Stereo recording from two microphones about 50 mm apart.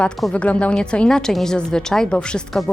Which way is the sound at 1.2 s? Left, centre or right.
Centre.